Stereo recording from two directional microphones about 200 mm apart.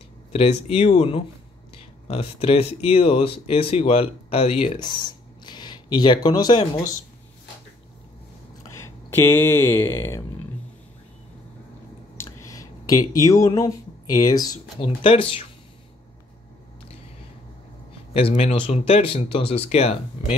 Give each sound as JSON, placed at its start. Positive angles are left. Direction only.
{"t": 0.3, "sound": "speech", "side_deg": 30}
{"t": 8.6, "sound": "speech", "side_deg": 15}
{"t": 12.2, "sound": "speech", "side_deg": 15}
{"t": 18.1, "sound": "speech", "side_deg": 30}